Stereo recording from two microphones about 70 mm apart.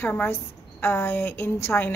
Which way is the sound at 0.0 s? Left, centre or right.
Left.